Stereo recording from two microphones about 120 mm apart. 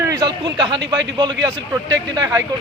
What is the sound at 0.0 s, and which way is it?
Speech, 30° right (ahead or behind).